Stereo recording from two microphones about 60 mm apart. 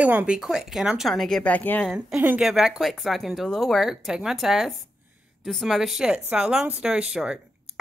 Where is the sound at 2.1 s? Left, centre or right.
Right.